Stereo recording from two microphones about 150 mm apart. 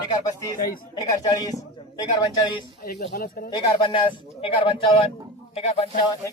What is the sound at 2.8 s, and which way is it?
Speech, 90° left.